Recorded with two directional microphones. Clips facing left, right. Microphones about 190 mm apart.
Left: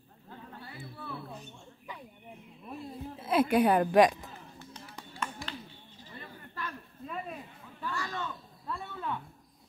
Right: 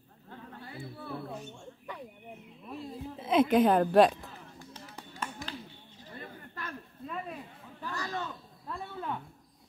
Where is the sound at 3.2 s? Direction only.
10° left (ahead or behind).